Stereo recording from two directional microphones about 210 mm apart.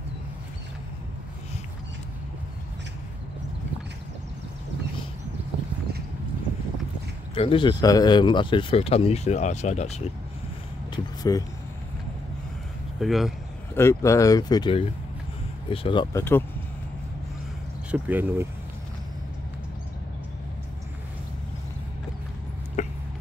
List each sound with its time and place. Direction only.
7.3 s speech: 25° left (ahead or behind)
11.3 s speech: 15° left (ahead or behind)
13.0 s speech: centre (ahead or behind)
13.7 s speech: 15° left (ahead or behind)
17.9 s speech: 10° right (ahead or behind)
22.8 s a sound: 35° left (ahead or behind)